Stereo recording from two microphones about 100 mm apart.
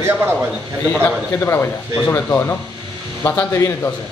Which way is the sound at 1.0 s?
20° left (ahead or behind).